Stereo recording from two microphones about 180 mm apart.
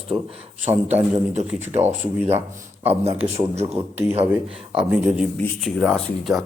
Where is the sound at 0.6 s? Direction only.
40° right (ahead or behind).